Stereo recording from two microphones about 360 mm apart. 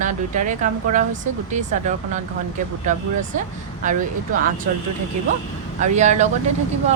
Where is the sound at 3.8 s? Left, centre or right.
Right.